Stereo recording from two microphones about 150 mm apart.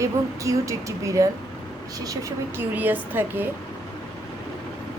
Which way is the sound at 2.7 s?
10° right (ahead or behind).